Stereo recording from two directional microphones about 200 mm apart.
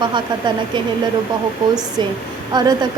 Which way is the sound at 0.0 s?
25° right (ahead or behind).